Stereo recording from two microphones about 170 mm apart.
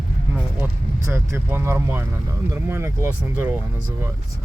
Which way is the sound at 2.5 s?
15° right (ahead or behind).